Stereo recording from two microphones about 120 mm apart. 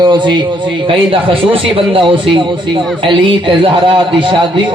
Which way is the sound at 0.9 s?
50° right (ahead or behind).